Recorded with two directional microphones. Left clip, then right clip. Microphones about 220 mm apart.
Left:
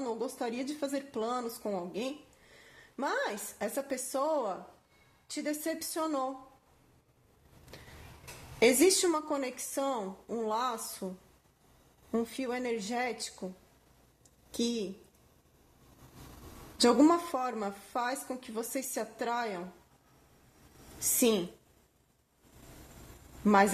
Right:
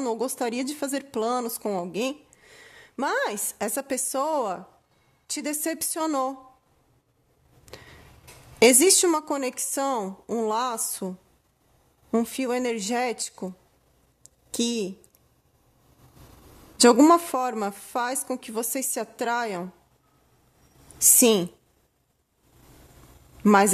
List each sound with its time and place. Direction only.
0.0 s a woman's voice: 45° right (ahead or behind)
8.5 s a woman's voice: 45° right (ahead or behind)
12.1 s a woman's voice: 45° right (ahead or behind)
14.2 s a sound: 45° right (ahead or behind)
16.7 s a woman's voice: 45° right (ahead or behind)
21.2 s a woman's voice: 45° right (ahead or behind)
23.4 s speech: 45° right (ahead or behind)